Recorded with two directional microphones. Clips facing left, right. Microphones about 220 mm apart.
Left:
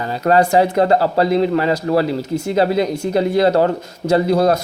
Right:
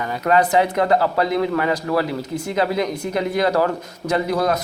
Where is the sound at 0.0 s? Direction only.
30° left (ahead or behind).